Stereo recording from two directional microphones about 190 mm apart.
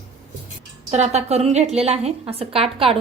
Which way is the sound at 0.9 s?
35° right (ahead or behind).